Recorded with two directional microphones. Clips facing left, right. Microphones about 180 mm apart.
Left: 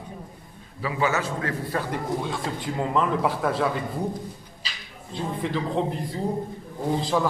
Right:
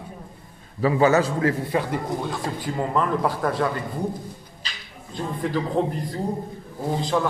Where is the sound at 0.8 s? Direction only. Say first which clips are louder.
Right 7 dB; 40° right (ahead or behind).